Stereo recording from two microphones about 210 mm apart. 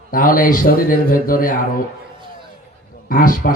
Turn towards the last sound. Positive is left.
turn(degrees=40)  # may be behind; listen again after turning